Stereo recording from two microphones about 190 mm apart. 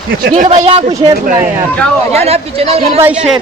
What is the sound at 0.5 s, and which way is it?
Speech, 35° right (ahead or behind).